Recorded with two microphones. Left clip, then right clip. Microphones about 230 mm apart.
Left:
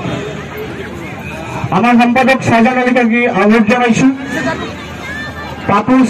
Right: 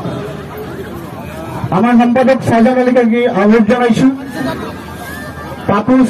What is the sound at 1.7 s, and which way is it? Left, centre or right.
A man's voice, right.